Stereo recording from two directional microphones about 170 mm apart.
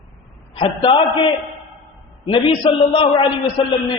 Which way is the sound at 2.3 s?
30° left (ahead or behind).